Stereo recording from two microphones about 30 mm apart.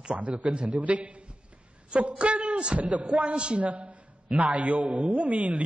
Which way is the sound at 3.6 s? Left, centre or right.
Right.